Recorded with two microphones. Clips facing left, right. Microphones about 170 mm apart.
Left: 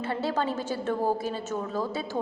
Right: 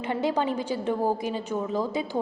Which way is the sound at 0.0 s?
15° right (ahead or behind).